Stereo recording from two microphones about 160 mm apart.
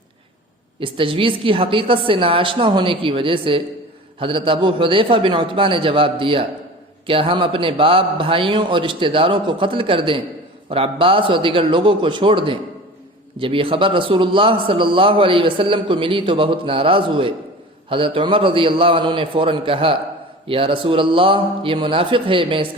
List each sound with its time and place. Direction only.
0.8 s a man's voice: 35° right (ahead or behind)